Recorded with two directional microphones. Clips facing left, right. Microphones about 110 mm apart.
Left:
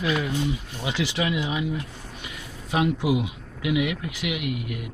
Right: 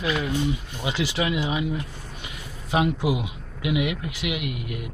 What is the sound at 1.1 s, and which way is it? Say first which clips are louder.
Speech: right 1 dB; 20° right (ahead or behind).